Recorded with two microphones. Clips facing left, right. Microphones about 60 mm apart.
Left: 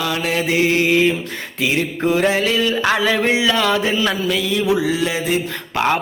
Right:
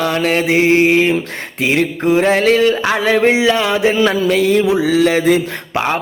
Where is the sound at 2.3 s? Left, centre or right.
Right.